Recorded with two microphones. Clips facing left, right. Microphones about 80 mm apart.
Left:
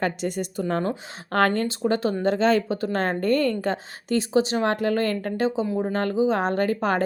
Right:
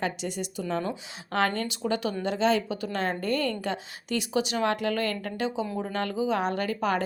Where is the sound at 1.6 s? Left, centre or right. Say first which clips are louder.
Left 5 dB; left.